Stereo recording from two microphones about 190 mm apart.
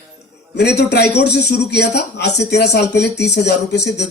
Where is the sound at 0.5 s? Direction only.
60° left (ahead or behind).